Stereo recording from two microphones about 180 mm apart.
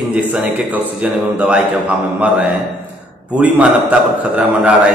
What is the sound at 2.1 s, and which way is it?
A man's voice, 10° right (ahead or behind).